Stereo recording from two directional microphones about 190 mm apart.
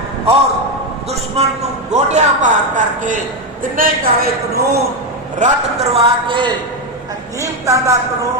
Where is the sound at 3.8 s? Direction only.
55° right (ahead or behind).